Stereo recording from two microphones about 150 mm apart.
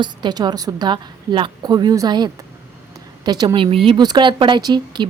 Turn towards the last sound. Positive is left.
turn(degrees=-30)  # may be behind; listen again after turning